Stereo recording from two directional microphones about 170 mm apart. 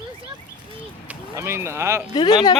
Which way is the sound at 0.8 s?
10° right (ahead or behind).